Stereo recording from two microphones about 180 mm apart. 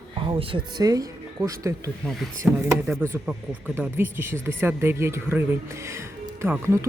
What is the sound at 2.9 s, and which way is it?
Speech, 10° right (ahead or behind).